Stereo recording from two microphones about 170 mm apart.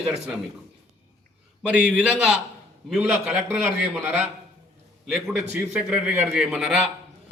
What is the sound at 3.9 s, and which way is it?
Speech, 5° right (ahead or behind).